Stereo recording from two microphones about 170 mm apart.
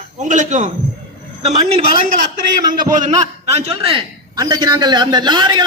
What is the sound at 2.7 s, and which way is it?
Speech, 45° right (ahead or behind).